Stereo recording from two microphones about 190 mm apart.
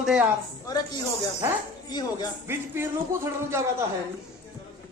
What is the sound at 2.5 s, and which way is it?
Speech, 10° right (ahead or behind).